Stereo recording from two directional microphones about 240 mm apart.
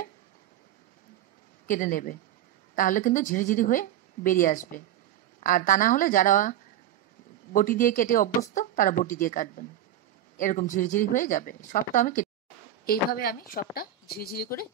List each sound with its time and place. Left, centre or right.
1.7 s a woman's voice: left
7.5 s a woman's voice: left